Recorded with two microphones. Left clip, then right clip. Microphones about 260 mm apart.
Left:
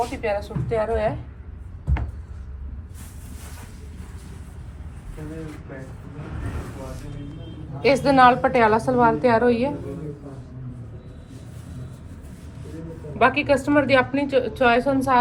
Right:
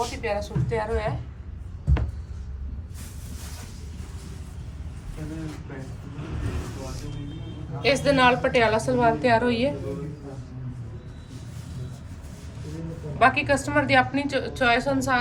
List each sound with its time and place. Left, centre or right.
0.0 s speech: centre
7.8 s a woman's voice: left
13.1 s a woman's voice: left